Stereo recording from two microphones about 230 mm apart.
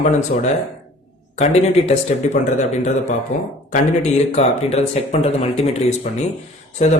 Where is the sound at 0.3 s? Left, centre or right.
Left.